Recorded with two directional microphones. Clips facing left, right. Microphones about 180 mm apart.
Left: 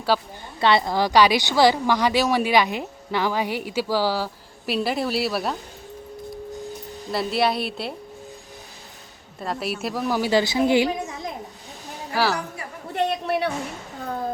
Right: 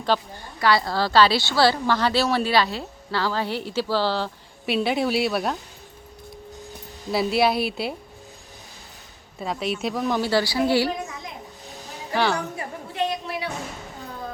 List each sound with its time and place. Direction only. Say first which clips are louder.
0.1 s a woman's voice: left 1 dB; 10° left (ahead or behind)
0.6 s a woman's voice: left 2 dB; 20° left (ahead or behind); by 5.5 s centre (ahead or behind)
7.1 s a woman's voice: right 2 dB; centre (ahead or behind)
9.4 s a woman's voice: right 1 dB; centre (ahead or behind); by 10.9 s 20° left (ahead or behind)
12.1 s a woman's voice: even; 5° left (ahead or behind)
12.9 s a sound: left 4 dB; 60° left (ahead or behind)